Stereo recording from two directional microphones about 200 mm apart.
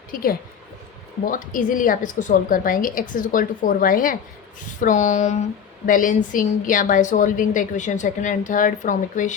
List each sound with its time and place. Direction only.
0.1 s a woman's voice: 45° left (ahead or behind)